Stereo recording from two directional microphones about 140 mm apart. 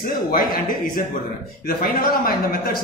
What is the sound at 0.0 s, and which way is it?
A man's voice, 90° left.